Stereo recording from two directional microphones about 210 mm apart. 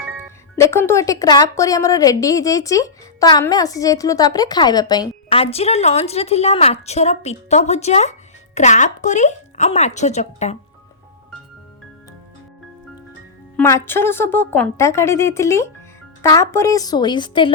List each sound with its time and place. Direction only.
0.5 s a woman's voice: 10° left (ahead or behind); by 10.6 s 30° left (ahead or behind)
13.6 s a woman's voice: 10° left (ahead or behind)